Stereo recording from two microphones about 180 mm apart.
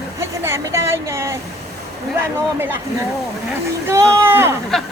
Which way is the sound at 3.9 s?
15° right (ahead or behind).